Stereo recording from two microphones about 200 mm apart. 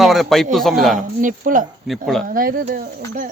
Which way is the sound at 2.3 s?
45° right (ahead or behind).